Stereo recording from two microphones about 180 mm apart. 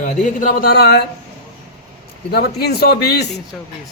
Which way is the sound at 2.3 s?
60° left (ahead or behind).